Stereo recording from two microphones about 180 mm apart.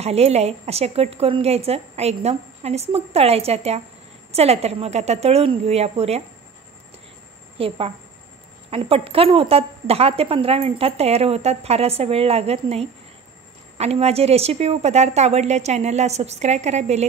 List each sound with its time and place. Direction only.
0.0 s a woman's voice: 35° right (ahead or behind)
7.5 s a woman's voice: 30° right (ahead or behind)